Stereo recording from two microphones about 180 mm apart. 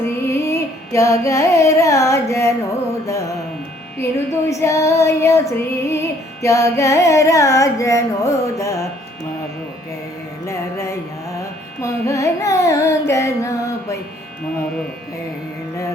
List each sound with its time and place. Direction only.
0.3 s carnatic music: 15° left (ahead or behind)
3.9 s carnatic music: 15° left (ahead or behind)
10.4 s carnatic music: 15° left (ahead or behind)